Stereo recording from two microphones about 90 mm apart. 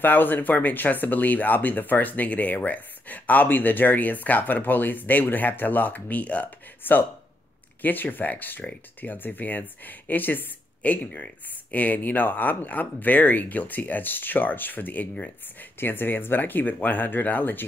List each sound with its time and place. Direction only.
0.0 s speech: 20° left (ahead or behind)